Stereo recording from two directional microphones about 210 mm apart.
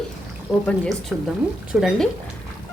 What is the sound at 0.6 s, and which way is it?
Speech, 5° left (ahead or behind).